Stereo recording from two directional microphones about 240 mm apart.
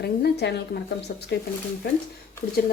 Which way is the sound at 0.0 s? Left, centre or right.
Left.